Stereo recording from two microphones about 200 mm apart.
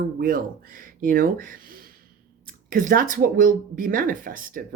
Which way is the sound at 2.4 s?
45° right (ahead or behind).